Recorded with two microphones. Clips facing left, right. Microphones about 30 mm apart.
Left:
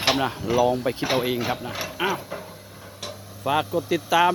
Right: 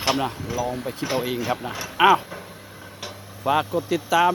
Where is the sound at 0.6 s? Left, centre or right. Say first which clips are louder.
Left 6 dB; left.